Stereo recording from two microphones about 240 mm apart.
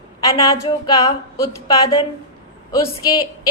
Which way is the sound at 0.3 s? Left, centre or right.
Centre.